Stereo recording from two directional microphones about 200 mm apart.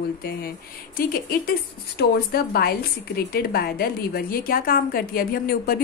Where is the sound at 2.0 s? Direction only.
50° left (ahead or behind).